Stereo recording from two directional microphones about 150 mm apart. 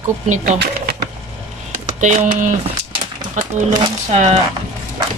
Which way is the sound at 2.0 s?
55° right (ahead or behind).